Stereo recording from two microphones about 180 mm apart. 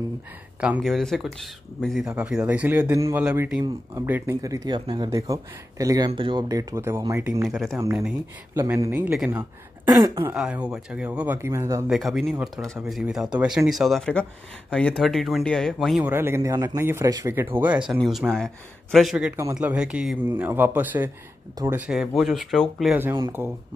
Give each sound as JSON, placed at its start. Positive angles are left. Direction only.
{"t": 0.6, "sound": "speech", "side_deg": -5}
{"t": 3.6, "sound": "speech", "side_deg": -15}
{"t": 7.4, "sound": "speech", "side_deg": 0}
{"t": 8.5, "sound": "speech", "side_deg": -15}
{"t": 9.8, "sound": "speech", "side_deg": -20}
{"t": 10.3, "sound": "speech", "side_deg": -5}
{"t": 11.9, "sound": "speech", "side_deg": 0}
{"t": 16.1, "sound": "speech", "side_deg": -15}
{"t": 23.4, "sound": "speech", "side_deg": -10}